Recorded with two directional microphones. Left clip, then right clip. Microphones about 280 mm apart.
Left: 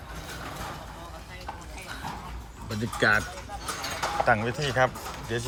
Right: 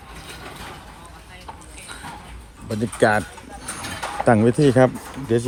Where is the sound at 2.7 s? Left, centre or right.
Centre.